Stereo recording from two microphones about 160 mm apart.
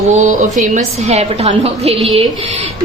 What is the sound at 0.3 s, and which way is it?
A woman's voice, 50° right (ahead or behind).